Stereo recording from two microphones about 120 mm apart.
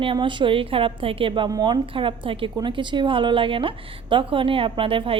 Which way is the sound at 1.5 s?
35° right (ahead or behind).